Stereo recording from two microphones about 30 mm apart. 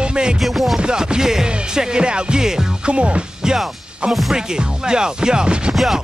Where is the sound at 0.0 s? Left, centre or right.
Right.